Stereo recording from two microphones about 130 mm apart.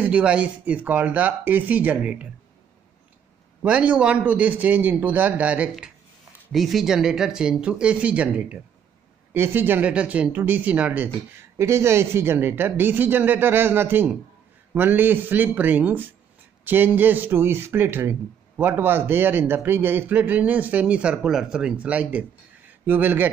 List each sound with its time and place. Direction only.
0.0 s speech: 10° right (ahead or behind)
3.6 s speech: 10° right (ahead or behind)